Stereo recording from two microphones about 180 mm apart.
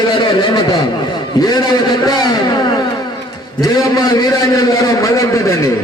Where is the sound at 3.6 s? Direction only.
20° left (ahead or behind).